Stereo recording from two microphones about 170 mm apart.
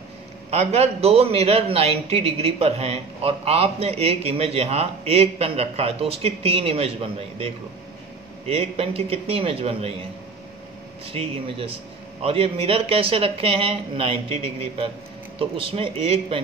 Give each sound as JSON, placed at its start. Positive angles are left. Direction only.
{"t": 0.5, "sound": "a man's voice", "side_deg": -40}
{"t": 11.1, "sound": "a man's voice", "side_deg": -35}
{"t": 15.3, "sound": "a man's voice", "side_deg": -35}